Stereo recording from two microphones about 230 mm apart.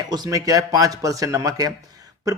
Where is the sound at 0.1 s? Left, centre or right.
Centre.